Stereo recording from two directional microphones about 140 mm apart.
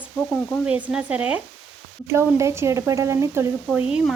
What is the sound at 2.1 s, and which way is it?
A woman's voice, 20° right (ahead or behind).